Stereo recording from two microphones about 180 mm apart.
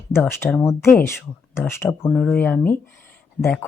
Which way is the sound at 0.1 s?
15° left (ahead or behind).